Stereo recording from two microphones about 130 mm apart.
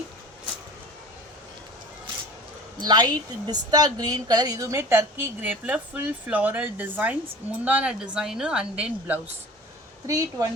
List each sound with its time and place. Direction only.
2.8 s a woman's voice: 30° right (ahead or behind); by 9.2 s 10° right (ahead or behind)
10.1 s a woman's voice: 25° right (ahead or behind)